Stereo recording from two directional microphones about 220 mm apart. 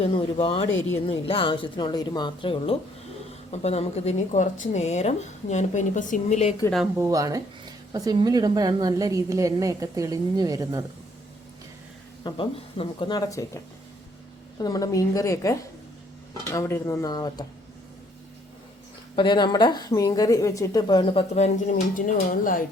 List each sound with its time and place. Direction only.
0.0 s speech: 25° left (ahead or behind)
0.7 s speech: 65° left (ahead or behind)
0.9 s a woman's voice: 25° left (ahead or behind)
7.0 s a woman's voice: 15° right (ahead or behind)
12.2 s a woman's voice: 25° left (ahead or behind)
14.6 s speech: 15° left (ahead or behind)
19.1 s a woman's voice: 20° left (ahead or behind); by 22.6 s 40° left (ahead or behind)